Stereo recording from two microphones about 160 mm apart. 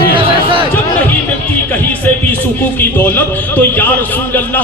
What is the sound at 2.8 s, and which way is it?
Speech, 15° left (ahead or behind).